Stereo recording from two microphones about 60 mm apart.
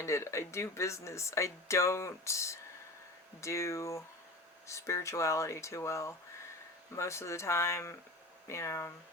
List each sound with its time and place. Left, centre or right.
0.0 s speech: left